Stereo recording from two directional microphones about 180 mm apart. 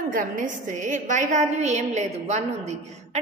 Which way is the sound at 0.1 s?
45° right (ahead or behind).